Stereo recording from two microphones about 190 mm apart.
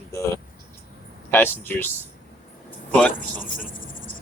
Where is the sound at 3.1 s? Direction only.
45° left (ahead or behind).